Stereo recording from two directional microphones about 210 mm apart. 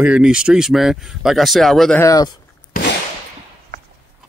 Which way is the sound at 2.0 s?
15° left (ahead or behind).